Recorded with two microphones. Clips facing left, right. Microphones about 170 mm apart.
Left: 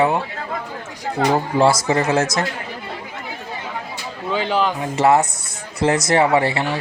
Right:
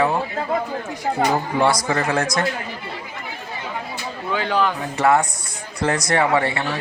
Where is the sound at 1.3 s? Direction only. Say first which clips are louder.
Left 6 dB; 30° left (ahead or behind).